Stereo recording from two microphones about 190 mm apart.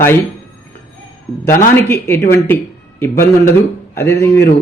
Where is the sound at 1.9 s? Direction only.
10° left (ahead or behind).